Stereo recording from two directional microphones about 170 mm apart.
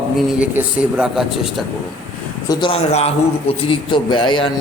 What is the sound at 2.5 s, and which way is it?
A man's voice, 30° left (ahead or behind).